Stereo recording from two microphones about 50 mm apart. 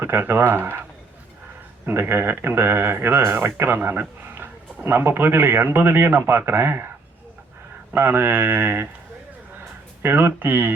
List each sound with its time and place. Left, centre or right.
0.0 s speech: right
1.9 s speech: right
7.9 s speech: right
10.0 s speech: right